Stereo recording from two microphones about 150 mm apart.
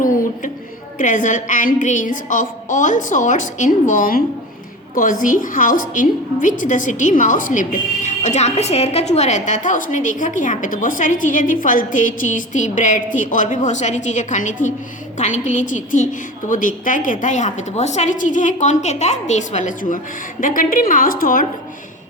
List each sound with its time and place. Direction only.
0.9 s a woman's voice: 60° left (ahead or behind)